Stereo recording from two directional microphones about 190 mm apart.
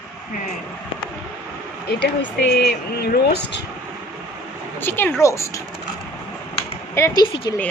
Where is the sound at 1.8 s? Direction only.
60° left (ahead or behind).